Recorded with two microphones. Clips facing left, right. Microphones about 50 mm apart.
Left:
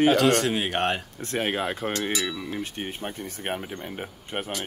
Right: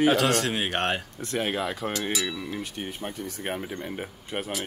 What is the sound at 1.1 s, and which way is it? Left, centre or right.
Speech, left.